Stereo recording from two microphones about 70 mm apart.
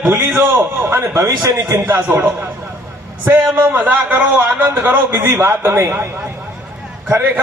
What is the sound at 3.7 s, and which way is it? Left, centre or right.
A man's voice, right.